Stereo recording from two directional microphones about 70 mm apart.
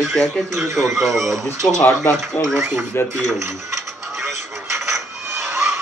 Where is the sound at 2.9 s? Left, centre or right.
Left.